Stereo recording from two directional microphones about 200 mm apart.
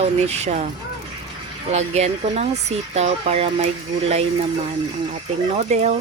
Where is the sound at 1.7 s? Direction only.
35° right (ahead or behind).